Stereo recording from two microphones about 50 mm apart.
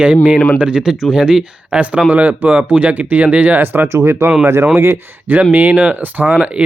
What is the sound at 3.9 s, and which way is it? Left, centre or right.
Speech, right.